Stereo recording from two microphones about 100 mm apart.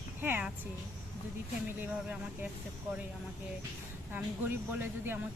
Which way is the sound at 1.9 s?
15° right (ahead or behind).